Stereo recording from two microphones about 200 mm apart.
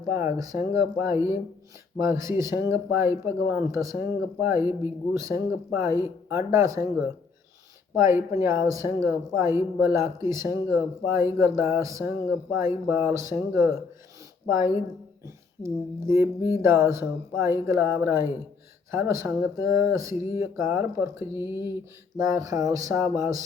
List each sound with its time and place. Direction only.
0.1 s speech: 15° right (ahead or behind)
7.9 s speech: 15° right (ahead or behind)
15.6 s speech: 15° right (ahead or behind)